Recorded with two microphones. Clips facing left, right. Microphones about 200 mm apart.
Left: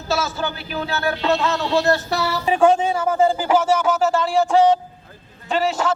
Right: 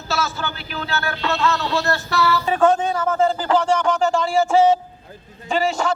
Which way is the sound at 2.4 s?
10° left (ahead or behind).